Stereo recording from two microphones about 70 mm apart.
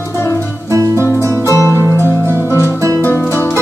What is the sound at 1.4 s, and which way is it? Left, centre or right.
Music, left.